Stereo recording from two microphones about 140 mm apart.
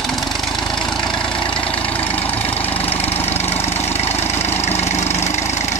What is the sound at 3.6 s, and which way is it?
Vehicle, 15° left (ahead or behind).